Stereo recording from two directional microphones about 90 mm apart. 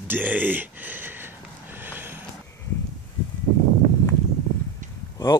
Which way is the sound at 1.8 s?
25° right (ahead or behind).